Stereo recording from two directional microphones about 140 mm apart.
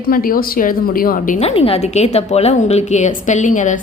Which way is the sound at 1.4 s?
45° left (ahead or behind).